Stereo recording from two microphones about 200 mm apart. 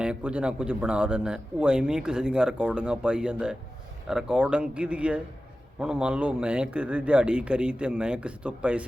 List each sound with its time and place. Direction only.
0.0 s a man's voice: 5° right (ahead or behind)